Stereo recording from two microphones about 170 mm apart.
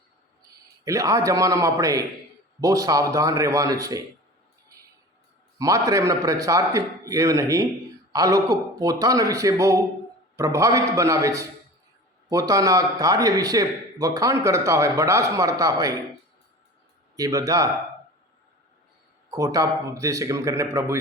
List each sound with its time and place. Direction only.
0.9 s speech: 20° right (ahead or behind)
5.5 s speech: 20° right (ahead or behind)
17.2 s speech: 20° right (ahead or behind)
19.3 s a man's voice: 20° right (ahead or behind)